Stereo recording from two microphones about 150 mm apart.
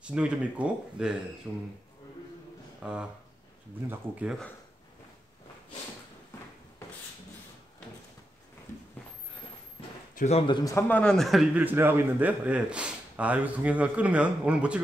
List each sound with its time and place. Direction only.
0.0 s speech: 5° right (ahead or behind)
2.8 s speech: 5° right (ahead or behind)
10.1 s a man's voice: 50° left (ahead or behind)
10.4 s a man's voice: 25° left (ahead or behind); by 11.4 s centre (ahead or behind)
11.5 s speech: 15° right (ahead or behind)